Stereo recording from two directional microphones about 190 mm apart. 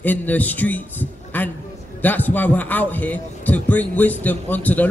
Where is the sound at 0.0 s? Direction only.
10° left (ahead or behind).